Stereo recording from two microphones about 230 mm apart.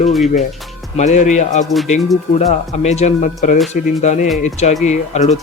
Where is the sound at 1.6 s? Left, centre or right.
Centre.